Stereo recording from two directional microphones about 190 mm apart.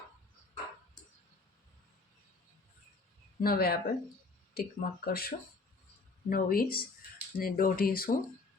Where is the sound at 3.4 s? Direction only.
50° left (ahead or behind).